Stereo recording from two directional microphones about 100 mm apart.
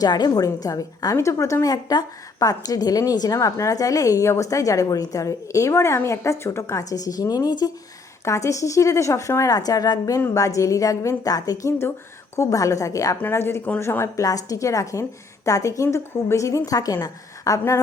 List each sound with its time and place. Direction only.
0.0 s a woman's voice: 45° left (ahead or behind)
10.2 s a woman's voice: 30° left (ahead or behind)